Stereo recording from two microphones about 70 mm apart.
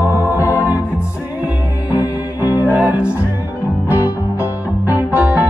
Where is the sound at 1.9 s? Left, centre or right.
Right.